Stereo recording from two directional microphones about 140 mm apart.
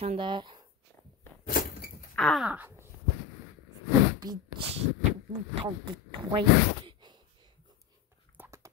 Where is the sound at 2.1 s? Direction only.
Centre (ahead or behind).